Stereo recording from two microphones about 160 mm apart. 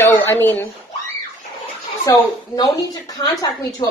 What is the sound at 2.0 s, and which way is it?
A woman's voice, 20° left (ahead or behind).